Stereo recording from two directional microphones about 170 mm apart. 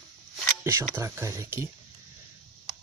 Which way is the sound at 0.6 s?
15° right (ahead or behind).